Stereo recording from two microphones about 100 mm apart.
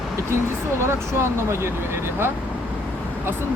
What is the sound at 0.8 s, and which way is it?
Speech, 25° right (ahead or behind).